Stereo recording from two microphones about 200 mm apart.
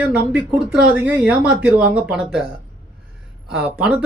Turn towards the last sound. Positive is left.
turn(degrees=-5)  # may be behind; listen again after turning